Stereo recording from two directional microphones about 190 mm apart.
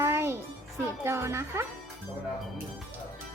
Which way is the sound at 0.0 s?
15° right (ahead or behind).